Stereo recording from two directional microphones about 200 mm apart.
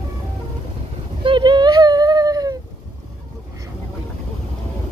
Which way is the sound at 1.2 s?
25° right (ahead or behind).